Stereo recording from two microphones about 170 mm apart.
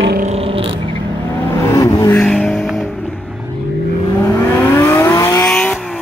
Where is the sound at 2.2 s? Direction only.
5° left (ahead or behind).